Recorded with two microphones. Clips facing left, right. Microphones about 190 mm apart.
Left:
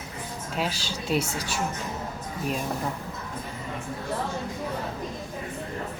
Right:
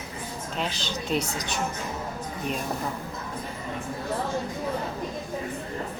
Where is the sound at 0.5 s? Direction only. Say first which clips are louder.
Left 1 dB; 5° left (ahead or behind).